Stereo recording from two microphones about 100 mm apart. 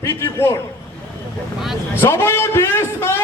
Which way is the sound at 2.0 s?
25° left (ahead or behind).